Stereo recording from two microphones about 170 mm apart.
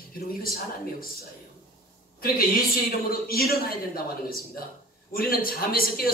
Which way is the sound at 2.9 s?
60° left (ahead or behind).